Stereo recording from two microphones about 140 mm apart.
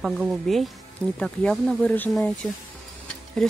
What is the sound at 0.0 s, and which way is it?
Speech, 5° right (ahead or behind).